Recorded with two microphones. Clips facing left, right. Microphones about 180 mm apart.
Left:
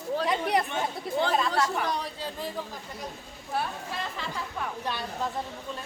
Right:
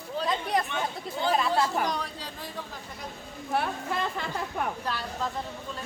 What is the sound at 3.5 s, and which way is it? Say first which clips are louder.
A woman's voice: right 3 dB; 60° right (ahead or behind).